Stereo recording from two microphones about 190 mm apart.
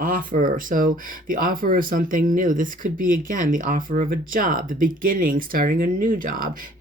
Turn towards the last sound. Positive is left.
turn(degrees=-45)  # may be behind; listen again after turning